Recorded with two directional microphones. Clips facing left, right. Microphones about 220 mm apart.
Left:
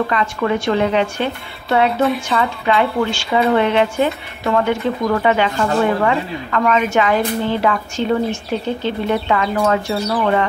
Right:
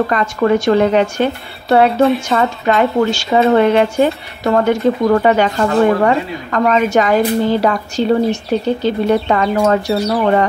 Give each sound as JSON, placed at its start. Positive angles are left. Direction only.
{"t": 0.1, "sound": "a woman's voice", "side_deg": -45}